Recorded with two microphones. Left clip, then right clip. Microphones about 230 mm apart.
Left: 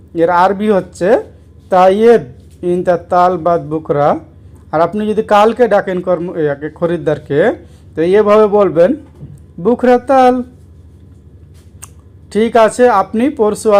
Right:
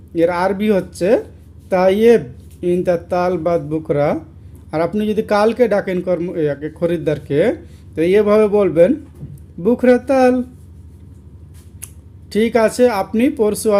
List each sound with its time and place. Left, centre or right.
0.1 s speech: centre
12.3 s speech: centre